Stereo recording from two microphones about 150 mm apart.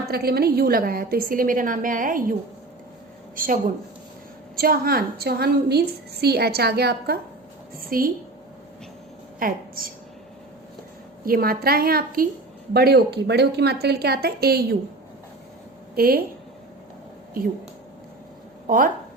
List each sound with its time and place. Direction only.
0.1 s a woman's voice: 90° right; by 2.2 s 65° right (ahead or behind)
3.3 s a woman's voice: 70° right (ahead or behind)
4.5 s a woman's voice: 80° right
7.8 s a woman's voice: 75° right (ahead or behind)
9.4 s a woman's voice: 70° right (ahead or behind)
11.3 s a woman's voice: 80° right
12.7 s speech: 90° right
16.0 s a woman's voice: 85° right
18.7 s a woman's voice: 70° right (ahead or behind)